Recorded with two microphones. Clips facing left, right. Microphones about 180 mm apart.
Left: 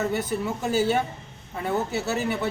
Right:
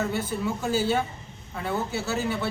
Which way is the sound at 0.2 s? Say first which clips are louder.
Left 1 dB; 20° left (ahead or behind).